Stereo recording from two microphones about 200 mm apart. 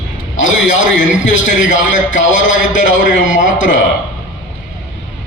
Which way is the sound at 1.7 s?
40° left (ahead or behind).